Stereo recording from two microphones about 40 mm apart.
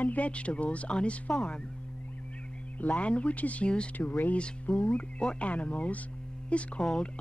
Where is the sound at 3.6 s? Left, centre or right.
Left.